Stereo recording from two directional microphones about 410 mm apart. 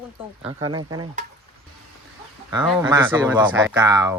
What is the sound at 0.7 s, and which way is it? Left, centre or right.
Speech, centre.